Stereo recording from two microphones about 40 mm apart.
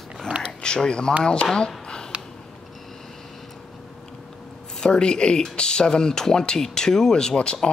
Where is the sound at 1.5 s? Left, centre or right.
Left.